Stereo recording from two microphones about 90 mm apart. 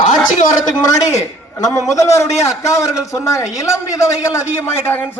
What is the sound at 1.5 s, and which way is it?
A man's voice, 40° left (ahead or behind).